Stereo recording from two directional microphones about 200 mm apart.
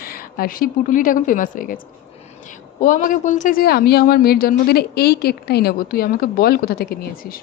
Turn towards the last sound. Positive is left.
turn(degrees=50)  # may be behind; listen again after turning